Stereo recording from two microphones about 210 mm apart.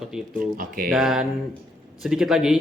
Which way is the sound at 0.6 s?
45° right (ahead or behind).